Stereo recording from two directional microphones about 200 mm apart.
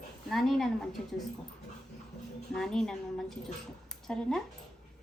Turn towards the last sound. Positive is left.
turn(degrees=5)  # may be behind; listen again after turning